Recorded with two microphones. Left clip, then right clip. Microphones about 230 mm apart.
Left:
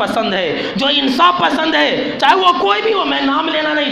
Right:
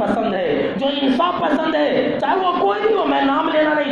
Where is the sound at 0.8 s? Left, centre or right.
Left.